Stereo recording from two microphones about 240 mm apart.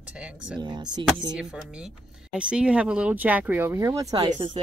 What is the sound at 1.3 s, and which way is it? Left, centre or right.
Speech, centre.